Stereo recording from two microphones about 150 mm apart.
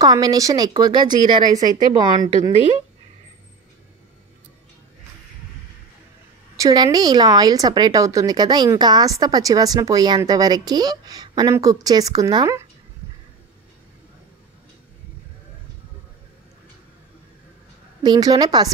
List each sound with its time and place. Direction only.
0.0 s speech: 25° right (ahead or behind)
6.5 s speech: 25° right (ahead or behind)
18.0 s speech: 25° right (ahead or behind)